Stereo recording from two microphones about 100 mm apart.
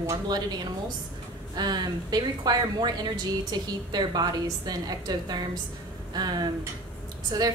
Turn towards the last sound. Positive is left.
turn(degrees=-40)  # may be behind; listen again after turning